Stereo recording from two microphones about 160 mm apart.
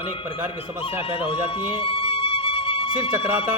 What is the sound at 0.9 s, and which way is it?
Music, 35° left (ahead or behind).